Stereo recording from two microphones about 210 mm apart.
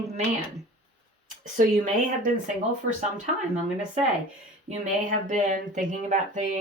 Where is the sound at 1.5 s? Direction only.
35° right (ahead or behind).